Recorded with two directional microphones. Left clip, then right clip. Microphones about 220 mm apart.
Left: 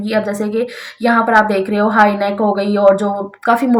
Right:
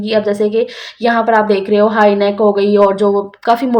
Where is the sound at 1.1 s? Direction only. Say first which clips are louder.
Even; 40° right (ahead or behind).